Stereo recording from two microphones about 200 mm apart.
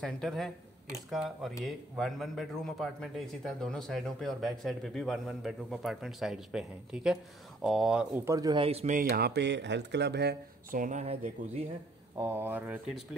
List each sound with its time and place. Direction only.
0.0 s a man's voice: centre (ahead or behind)
8.3 s speech: 20° right (ahead or behind)
9.1 s speech: 55° right (ahead or behind); by 11.6 s 35° right (ahead or behind)
12.2 s speech: 10° right (ahead or behind)